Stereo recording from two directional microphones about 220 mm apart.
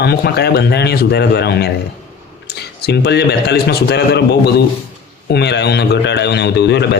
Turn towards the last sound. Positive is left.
turn(degrees=50)  # may be behind; listen again after turning